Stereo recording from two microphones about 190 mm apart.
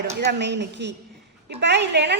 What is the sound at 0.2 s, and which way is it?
A woman's voice, 65° right (ahead or behind).